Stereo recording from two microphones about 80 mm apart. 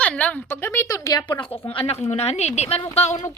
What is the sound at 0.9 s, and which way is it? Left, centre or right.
Speech, left.